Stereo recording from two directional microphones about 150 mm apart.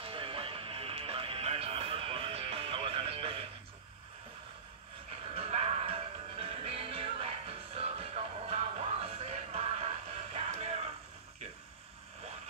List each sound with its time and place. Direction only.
0.0 s music: 35° right (ahead or behind)
5.3 s music: 45° right (ahead or behind)